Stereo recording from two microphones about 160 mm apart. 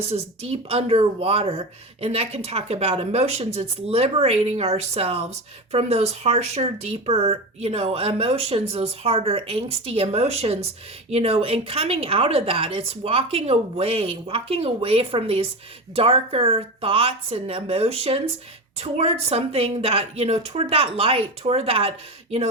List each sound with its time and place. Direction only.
0.1 s speech: 40° right (ahead or behind)